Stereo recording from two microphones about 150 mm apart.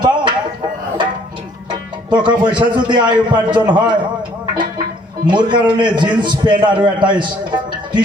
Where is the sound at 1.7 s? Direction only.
30° right (ahead or behind).